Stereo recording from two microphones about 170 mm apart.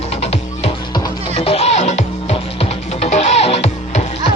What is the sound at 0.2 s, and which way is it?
Music, 40° left (ahead or behind).